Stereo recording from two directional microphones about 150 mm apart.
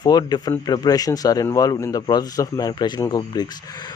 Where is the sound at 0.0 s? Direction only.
25° left (ahead or behind).